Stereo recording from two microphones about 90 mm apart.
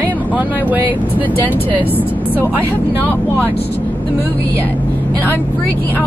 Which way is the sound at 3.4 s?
20° left (ahead or behind).